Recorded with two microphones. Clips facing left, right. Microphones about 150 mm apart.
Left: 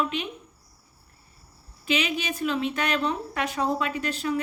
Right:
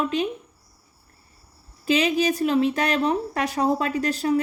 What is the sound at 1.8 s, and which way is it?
A woman's voice, 35° right (ahead or behind).